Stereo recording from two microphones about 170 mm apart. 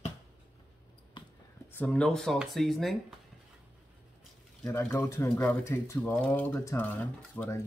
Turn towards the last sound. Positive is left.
turn(degrees=10)  # may be behind; listen again after turning